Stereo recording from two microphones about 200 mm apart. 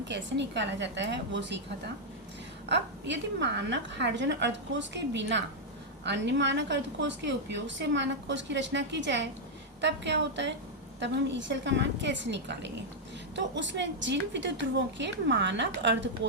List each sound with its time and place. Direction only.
0.1 s a woman's voice: 60° right (ahead or behind)
2.6 s a woman's voice: 60° right (ahead or behind)